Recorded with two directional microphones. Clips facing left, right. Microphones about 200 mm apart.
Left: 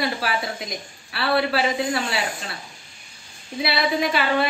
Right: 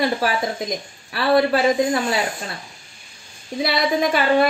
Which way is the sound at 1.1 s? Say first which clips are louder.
Right 5 dB; 40° right (ahead or behind).